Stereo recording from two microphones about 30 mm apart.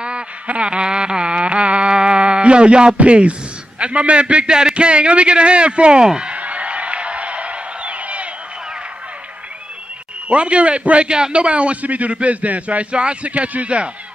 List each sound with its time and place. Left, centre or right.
0.6 s a sound: right
3.0 s a man's voice: right
6.3 s music: right
10.3 s a man's voice: right
12.9 s a man's voice: right